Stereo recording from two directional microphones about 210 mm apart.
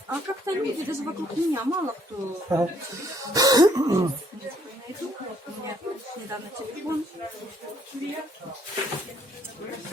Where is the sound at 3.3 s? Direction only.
15° right (ahead or behind).